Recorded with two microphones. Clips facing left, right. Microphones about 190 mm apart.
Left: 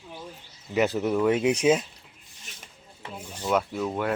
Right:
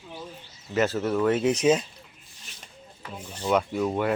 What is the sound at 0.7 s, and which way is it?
Speech, 15° left (ahead or behind).